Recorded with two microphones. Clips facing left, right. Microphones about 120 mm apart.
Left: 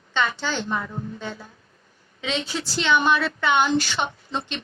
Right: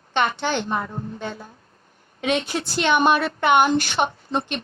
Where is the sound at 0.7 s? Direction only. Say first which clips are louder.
Right 2 dB; 45° right (ahead or behind).